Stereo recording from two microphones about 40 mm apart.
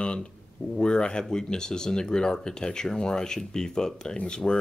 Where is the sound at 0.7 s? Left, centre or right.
Left.